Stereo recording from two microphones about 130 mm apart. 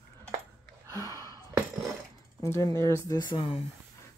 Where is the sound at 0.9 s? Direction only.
30° right (ahead or behind).